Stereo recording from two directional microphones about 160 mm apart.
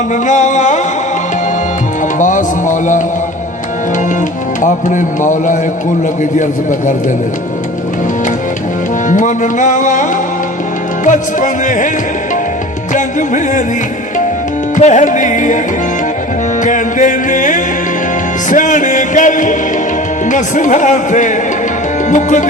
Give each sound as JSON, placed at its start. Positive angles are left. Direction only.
{"t": 0.1, "sound": "music", "side_deg": 50}
{"t": 2.1, "sound": "music", "side_deg": 55}
{"t": 4.6, "sound": "music", "side_deg": 50}
{"t": 9.0, "sound": "music", "side_deg": 50}
{"t": 12.9, "sound": "music", "side_deg": 50}
{"t": 14.8, "sound": "music", "side_deg": 50}
{"t": 16.6, "sound": "music", "side_deg": 55}